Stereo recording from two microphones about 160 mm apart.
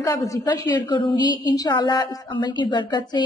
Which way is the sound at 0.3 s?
25° left (ahead or behind).